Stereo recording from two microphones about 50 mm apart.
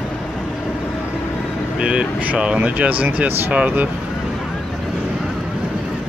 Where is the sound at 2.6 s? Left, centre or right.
Right.